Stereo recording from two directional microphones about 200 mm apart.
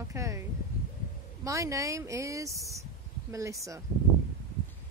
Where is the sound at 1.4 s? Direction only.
15° right (ahead or behind).